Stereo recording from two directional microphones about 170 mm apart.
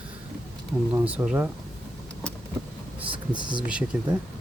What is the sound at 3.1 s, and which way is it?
Speech, 25° right (ahead or behind).